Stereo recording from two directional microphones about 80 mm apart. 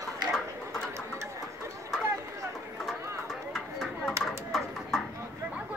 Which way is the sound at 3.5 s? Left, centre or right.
Centre.